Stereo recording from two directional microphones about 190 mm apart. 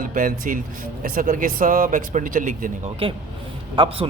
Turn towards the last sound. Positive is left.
turn(degrees=-25)  # may be behind; listen again after turning